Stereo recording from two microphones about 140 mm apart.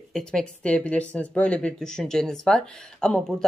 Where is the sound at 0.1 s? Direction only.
5° left (ahead or behind).